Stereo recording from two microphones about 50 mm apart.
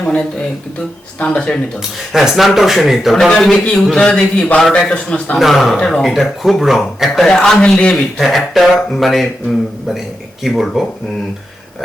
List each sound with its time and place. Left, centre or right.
0.0 s a man's voice: centre
2.1 s a man's voice: centre
3.9 s a man's voice: centre
5.4 s a man's voice: centre
5.7 s a man's voice: centre
6.0 s a man's voice: centre
7.3 s a man's voice: centre
7.6 s a man's voice: left
8.2 s a man's voice: centre